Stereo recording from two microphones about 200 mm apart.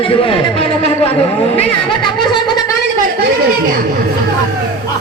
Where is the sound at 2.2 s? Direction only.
20° left (ahead or behind).